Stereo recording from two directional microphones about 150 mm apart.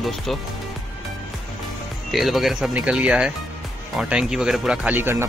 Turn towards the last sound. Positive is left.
turn(degrees=-15)  # may be behind; listen again after turning